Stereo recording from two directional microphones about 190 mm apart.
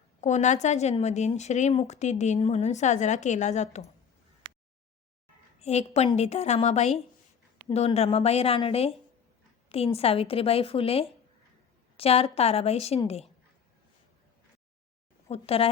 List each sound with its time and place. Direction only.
0.2 s a woman's voice: 40° left (ahead or behind)
5.5 s a woman's voice: 35° left (ahead or behind)
15.3 s a woman's voice: 30° left (ahead or behind)